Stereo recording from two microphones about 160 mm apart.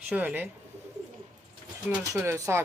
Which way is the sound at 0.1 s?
10° right (ahead or behind).